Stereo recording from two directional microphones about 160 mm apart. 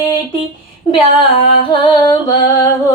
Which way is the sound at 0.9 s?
35° left (ahead or behind).